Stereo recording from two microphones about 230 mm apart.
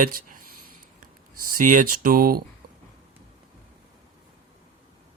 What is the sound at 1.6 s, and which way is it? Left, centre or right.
Speech, right.